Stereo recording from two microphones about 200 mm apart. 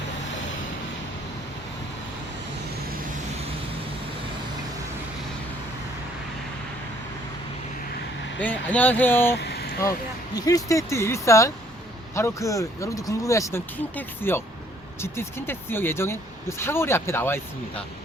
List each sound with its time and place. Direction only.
8.4 s speech: 5° left (ahead or behind)
9.3 s a sound: 55° left (ahead or behind)
10.4 s speech: 15° left (ahead or behind)